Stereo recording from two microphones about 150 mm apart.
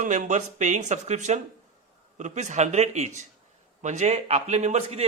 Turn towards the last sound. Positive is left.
turn(degrees=-45)  # may be behind; listen again after turning